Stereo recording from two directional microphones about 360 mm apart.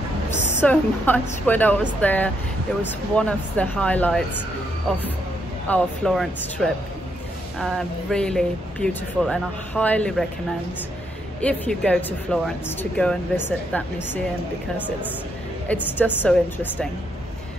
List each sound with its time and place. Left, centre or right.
0.3 s a sound: centre
0.6 s speech: centre
5.7 s speech: centre
11.4 s speech: centre
15.7 s speech: centre